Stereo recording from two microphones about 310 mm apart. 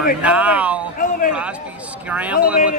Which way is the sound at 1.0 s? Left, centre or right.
Left.